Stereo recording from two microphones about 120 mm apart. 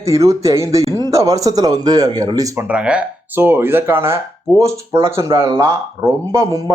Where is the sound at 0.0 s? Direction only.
25° right (ahead or behind).